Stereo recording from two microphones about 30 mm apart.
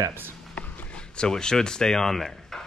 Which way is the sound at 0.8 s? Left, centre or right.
Left.